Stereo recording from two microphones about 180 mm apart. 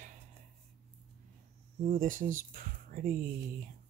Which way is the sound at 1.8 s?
50° right (ahead or behind).